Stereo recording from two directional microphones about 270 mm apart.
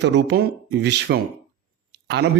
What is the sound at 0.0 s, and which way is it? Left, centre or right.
Speech, right.